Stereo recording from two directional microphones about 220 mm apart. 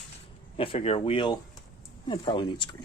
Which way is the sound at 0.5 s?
25° left (ahead or behind).